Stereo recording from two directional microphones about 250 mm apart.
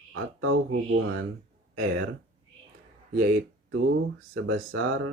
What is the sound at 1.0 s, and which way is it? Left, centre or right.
Speech, right.